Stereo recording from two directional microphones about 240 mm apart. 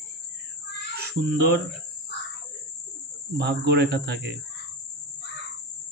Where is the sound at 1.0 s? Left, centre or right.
Right.